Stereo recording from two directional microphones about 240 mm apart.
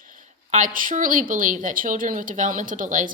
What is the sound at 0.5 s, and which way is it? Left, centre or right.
A woman's voice, right.